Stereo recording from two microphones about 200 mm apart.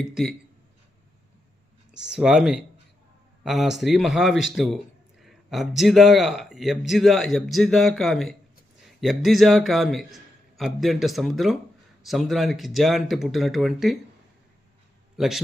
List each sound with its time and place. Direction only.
1.9 s speech: 5° right (ahead or behind)
15.2 s speech: centre (ahead or behind)